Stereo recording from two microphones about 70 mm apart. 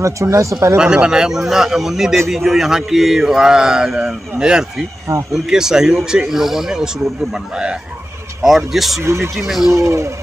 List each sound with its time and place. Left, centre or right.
0.0 s speech: right
0.7 s a man's voice: centre
9.0 s speech: right
9.3 s speech: centre
9.7 s speech: right